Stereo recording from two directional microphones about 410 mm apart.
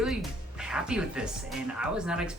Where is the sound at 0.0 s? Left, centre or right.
Centre.